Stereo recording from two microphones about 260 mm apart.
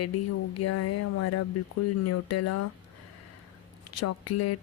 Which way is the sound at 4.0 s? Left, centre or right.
Left.